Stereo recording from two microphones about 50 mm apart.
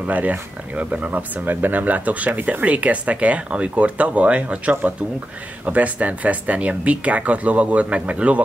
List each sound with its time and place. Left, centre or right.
0.0 s speech: right